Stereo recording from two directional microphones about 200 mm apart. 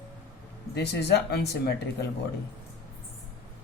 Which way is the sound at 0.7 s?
55° left (ahead or behind).